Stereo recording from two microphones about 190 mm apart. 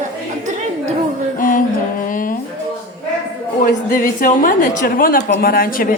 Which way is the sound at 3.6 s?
45° left (ahead or behind).